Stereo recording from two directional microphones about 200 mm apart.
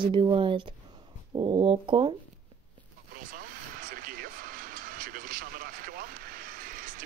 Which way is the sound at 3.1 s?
45° right (ahead or behind).